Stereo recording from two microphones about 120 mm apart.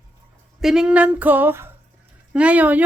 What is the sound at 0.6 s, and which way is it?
Speech, 5° right (ahead or behind).